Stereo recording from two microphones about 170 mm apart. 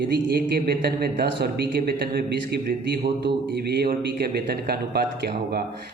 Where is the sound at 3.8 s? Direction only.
65° right (ahead or behind).